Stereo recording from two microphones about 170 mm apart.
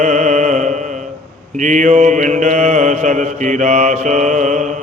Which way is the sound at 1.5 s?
50° right (ahead or behind).